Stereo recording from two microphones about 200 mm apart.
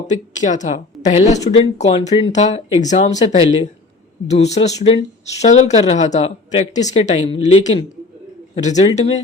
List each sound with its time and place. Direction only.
0.1 s speech: 40° left (ahead or behind)